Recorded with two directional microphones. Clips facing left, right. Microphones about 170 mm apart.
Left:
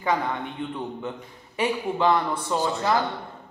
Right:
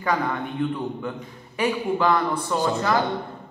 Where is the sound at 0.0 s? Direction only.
20° left (ahead or behind).